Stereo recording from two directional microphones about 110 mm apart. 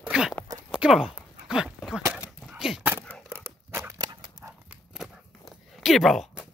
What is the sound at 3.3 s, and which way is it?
Dog, 25° right (ahead or behind).